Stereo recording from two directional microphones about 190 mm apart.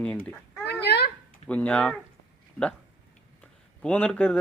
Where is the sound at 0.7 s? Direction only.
60° left (ahead or behind).